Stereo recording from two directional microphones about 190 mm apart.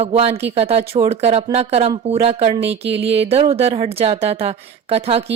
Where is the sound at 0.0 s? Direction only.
35° right (ahead or behind).